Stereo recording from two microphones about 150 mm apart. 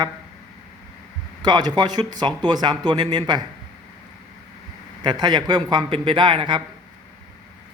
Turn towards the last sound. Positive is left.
turn(degrees=-30)  # may be behind; listen again after turning